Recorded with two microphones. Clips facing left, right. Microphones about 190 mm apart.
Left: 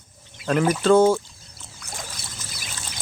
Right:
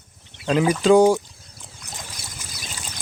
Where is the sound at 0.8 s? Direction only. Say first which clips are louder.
Right 2 dB; 15° right (ahead or behind).